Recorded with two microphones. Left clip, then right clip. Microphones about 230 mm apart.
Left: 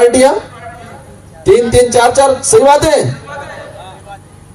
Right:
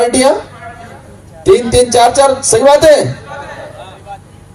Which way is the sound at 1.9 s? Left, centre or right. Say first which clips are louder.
Even; right.